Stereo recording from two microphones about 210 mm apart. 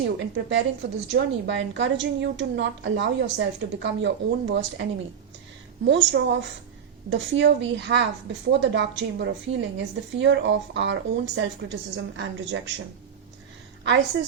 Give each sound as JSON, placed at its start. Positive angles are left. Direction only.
{"t": 0.2, "sound": "a woman's voice", "side_deg": -55}